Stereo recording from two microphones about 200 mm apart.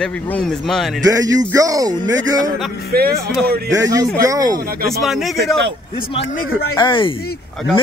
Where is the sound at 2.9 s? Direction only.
50° right (ahead or behind).